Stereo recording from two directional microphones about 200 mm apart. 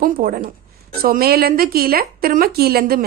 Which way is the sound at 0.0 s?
45° right (ahead or behind).